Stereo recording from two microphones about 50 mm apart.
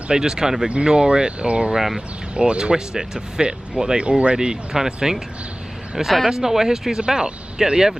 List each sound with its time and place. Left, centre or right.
0.1 s speech: centre
6.2 s speech: centre